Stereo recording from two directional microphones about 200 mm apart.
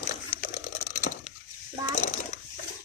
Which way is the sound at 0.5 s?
35° left (ahead or behind).